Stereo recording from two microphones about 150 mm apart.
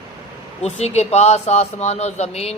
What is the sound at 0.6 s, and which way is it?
Speech, 45° left (ahead or behind).